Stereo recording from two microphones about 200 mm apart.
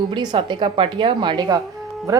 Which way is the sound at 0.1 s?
25° right (ahead or behind).